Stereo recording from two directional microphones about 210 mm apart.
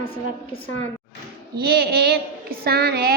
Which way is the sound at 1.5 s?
50° right (ahead or behind).